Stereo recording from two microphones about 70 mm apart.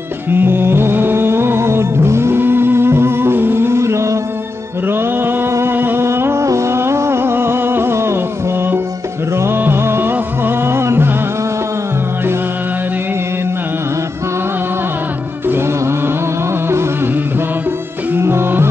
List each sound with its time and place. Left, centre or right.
0.3 s music: right
4.8 s music: right
15.4 s music: right
18.1 s music: right